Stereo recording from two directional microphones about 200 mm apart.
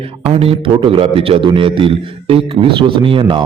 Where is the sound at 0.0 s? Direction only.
30° right (ahead or behind).